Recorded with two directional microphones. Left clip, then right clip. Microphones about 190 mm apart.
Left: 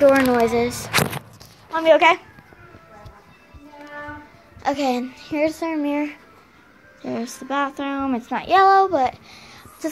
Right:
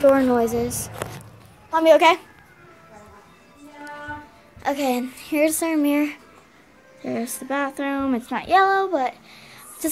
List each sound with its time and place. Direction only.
0.0 s child singing: 15° right (ahead or behind)
1.7 s a child's voice: 35° right (ahead or behind)
2.0 s child singing: 20° right (ahead or behind)
4.6 s speech: centre (ahead or behind)
5.0 s child singing: 15° right (ahead or behind)
7.0 s speech: centre (ahead or behind)